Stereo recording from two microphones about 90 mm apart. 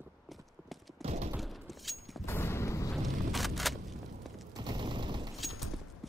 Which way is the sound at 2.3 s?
30° left (ahead or behind).